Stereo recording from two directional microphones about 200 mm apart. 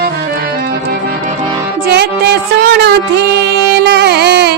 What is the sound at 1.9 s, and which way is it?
Music, 55° right (ahead or behind).